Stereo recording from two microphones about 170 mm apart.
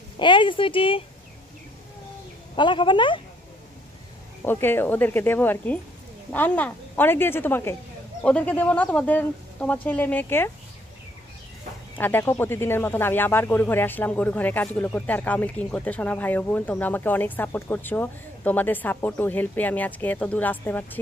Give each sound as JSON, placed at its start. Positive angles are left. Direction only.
{"t": 0.2, "sound": "speech", "side_deg": 30}
{"t": 2.5, "sound": "a woman's voice", "side_deg": 30}
{"t": 4.5, "sound": "speech", "side_deg": 15}
{"t": 12.0, "sound": "speech", "side_deg": 15}